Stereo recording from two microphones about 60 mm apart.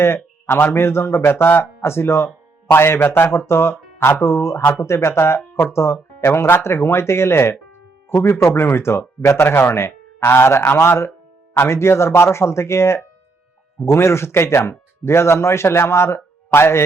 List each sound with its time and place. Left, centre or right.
0.0 s a man's voice: left